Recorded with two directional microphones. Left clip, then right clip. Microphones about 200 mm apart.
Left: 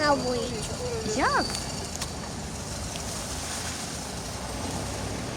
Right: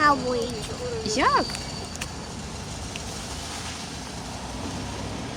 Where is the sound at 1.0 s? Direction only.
20° right (ahead or behind).